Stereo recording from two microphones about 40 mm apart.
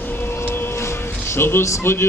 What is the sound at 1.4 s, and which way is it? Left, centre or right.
Speech, left.